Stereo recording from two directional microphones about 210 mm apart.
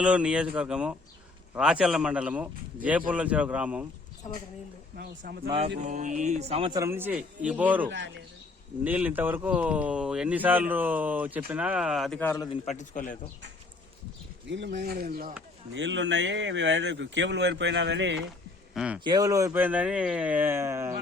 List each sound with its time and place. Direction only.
0.0 s speech: 5° right (ahead or behind)
4.9 s speech: 45° right (ahead or behind)
5.5 s a man's voice: 25° right (ahead or behind); by 7.9 s 10° right (ahead or behind)
7.9 s speech: 60° right (ahead or behind)
8.8 s speech: 10° right (ahead or behind); by 12.5 s 10° left (ahead or behind)
12.5 s a man's voice: 35° left (ahead or behind)
14.4 s speech: 55° right (ahead or behind)
15.7 s speech: 60° right (ahead or behind)
18.7 s speech: 5° right (ahead or behind)
19.0 s speech: 15° right (ahead or behind)